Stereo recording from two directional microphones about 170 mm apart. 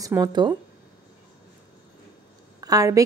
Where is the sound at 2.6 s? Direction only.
20° right (ahead or behind).